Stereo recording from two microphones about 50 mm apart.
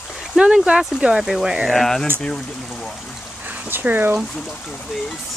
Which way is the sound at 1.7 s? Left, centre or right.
Centre.